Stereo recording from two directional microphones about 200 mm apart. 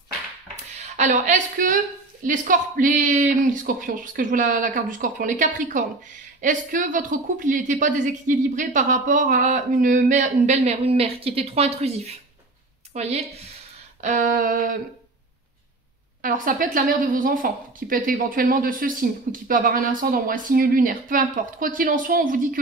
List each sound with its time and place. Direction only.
0.7 s a woman's voice: 35° right (ahead or behind)
16.2 s speech: 45° right (ahead or behind)